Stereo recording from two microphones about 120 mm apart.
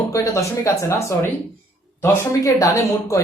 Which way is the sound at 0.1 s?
25° left (ahead or behind).